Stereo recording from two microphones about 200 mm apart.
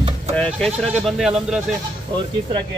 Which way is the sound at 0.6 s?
5° left (ahead or behind).